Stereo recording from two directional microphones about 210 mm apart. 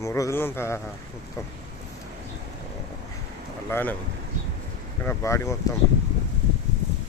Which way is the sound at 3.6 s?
10° left (ahead or behind).